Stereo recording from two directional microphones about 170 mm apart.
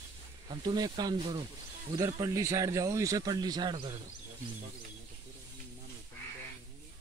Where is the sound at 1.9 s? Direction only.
20° right (ahead or behind).